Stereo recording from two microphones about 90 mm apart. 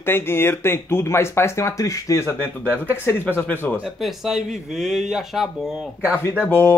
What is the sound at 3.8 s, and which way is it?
Speech, centre (ahead or behind).